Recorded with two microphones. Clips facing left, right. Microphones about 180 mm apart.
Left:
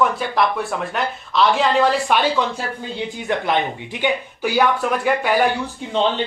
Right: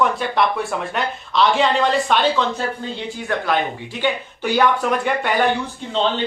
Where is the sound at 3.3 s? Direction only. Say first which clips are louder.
Left 1 dB; 20° left (ahead or behind).